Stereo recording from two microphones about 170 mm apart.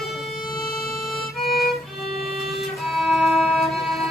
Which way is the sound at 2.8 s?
Centre (ahead or behind).